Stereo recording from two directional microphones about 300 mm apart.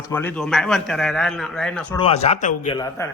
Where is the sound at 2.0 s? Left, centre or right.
Left.